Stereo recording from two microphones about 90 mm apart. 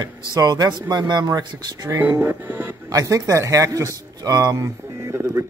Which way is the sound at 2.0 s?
25° right (ahead or behind).